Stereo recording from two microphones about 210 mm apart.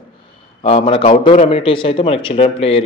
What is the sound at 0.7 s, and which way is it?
Speech, 25° left (ahead or behind).